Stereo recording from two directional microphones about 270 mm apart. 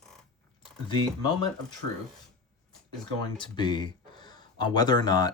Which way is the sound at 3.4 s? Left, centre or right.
Centre.